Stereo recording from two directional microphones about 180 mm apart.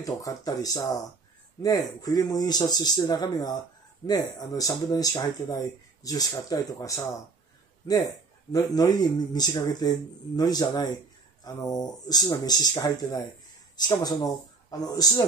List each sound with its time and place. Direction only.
0.0 s speech: 20° left (ahead or behind)
8.5 s speech: 20° left (ahead or behind)